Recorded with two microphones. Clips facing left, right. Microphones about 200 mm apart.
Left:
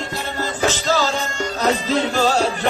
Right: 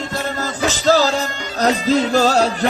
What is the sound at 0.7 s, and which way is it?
Music, 40° right (ahead or behind).